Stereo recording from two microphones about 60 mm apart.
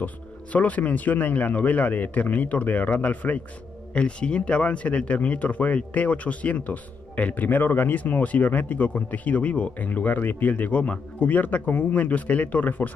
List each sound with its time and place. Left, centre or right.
0.0 s speech: left